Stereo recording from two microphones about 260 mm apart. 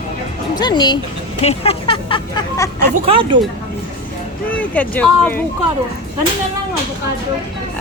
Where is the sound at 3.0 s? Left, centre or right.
Centre.